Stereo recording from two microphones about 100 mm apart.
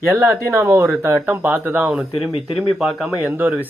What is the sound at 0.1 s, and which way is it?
Speech, 25° right (ahead or behind).